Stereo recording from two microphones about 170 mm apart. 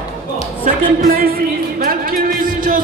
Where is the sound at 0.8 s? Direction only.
55° right (ahead or behind).